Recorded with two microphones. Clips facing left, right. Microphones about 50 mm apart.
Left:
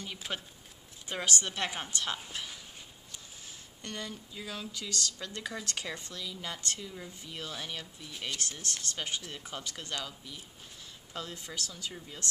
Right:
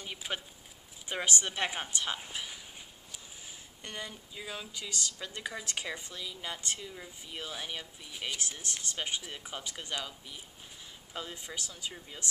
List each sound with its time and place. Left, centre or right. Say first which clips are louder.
0.0 s speech: even; centre